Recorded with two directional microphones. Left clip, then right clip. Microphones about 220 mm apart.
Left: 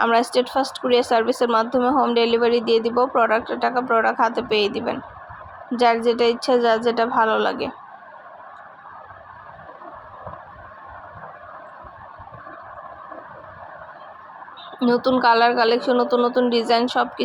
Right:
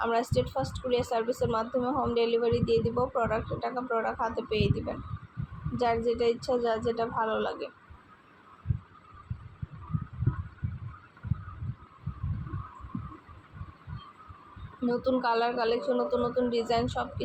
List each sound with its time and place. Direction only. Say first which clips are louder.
0.0 s speech: left 10 dB; 30° left (ahead or behind)
14.8 s speech: left 10 dB; 30° left (ahead or behind)